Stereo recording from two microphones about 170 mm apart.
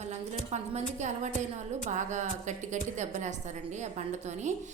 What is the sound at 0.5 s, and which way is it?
A woman's voice, 40° right (ahead or behind).